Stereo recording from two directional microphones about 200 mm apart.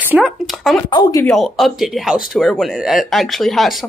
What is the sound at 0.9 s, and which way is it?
Speech, 20° left (ahead or behind).